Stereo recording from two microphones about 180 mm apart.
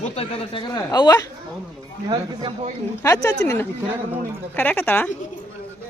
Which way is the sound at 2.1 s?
25° right (ahead or behind).